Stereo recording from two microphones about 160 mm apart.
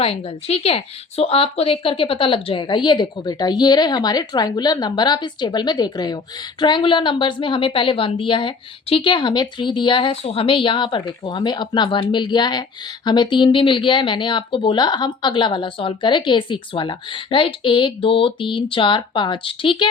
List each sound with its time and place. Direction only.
0.0 s a woman's voice: 40° left (ahead or behind)